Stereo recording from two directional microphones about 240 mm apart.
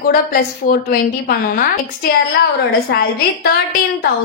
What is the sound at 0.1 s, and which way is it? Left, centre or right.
A woman's voice, left.